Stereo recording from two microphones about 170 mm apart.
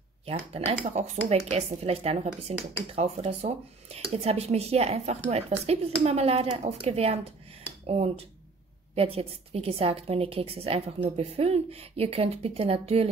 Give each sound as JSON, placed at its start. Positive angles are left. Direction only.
{"t": 0.3, "sound": "a woman's voice", "side_deg": -35}